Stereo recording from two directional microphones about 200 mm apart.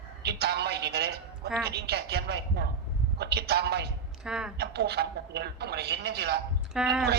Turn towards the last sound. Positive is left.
turn(degrees=-5)  # may be behind; listen again after turning